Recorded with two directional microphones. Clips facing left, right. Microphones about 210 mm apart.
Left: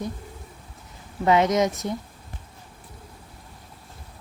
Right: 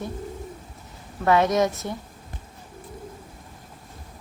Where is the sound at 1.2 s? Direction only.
20° left (ahead or behind).